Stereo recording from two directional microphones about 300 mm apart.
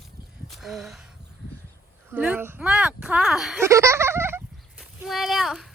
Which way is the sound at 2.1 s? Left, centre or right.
Centre.